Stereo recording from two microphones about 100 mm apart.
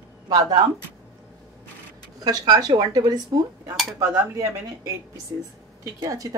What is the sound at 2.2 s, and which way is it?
A woman's voice, 40° right (ahead or behind).